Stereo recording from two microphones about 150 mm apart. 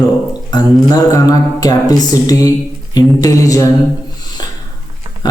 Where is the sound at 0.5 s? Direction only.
25° left (ahead or behind).